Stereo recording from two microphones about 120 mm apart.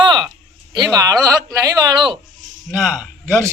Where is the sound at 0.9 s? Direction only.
30° right (ahead or behind).